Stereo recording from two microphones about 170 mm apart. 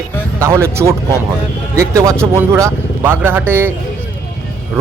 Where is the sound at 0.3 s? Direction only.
15° right (ahead or behind).